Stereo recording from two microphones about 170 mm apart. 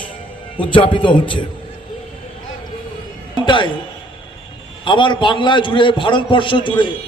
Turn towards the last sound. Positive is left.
turn(degrees=30)  # may be behind; listen again after turning